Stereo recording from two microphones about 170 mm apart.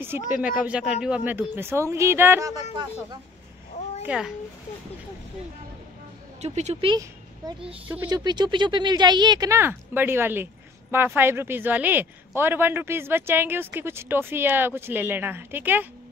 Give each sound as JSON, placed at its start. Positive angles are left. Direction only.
{"t": 0.3, "sound": "speech", "side_deg": -10}
{"t": 3.7, "sound": "a sound", "side_deg": 40}
{"t": 6.4, "sound": "speech", "side_deg": -40}
{"t": 8.1, "sound": "speech", "side_deg": -25}